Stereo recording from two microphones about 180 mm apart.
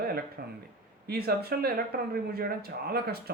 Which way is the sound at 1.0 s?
60° right (ahead or behind).